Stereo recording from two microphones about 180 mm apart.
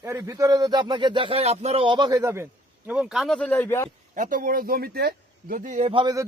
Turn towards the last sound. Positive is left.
turn(degrees=-25)  # may be behind; listen again after turning